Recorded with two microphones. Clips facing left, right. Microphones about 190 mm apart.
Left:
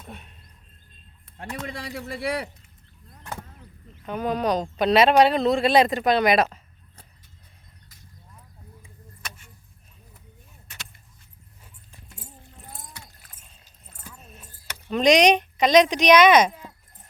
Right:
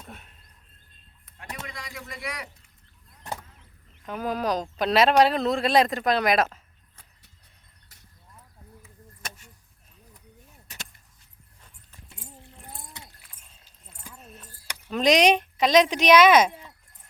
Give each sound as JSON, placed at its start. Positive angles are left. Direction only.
{"t": 1.6, "sound": "speech", "side_deg": 30}
{"t": 4.0, "sound": "speech", "side_deg": 0}
{"t": 9.2, "sound": "keys jangling", "side_deg": -45}
{"t": 10.7, "sound": "car", "side_deg": -35}
{"t": 12.9, "sound": "keys jangling", "side_deg": -20}
{"t": 13.3, "sound": "a sound", "side_deg": 5}
{"t": 14.2, "sound": "keys jangling", "side_deg": 5}
{"t": 14.8, "sound": "speech", "side_deg": -5}